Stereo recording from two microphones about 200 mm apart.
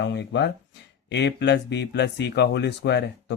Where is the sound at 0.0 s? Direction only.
60° left (ahead or behind).